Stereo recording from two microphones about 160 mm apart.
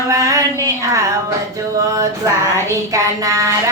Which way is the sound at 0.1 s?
20° right (ahead or behind).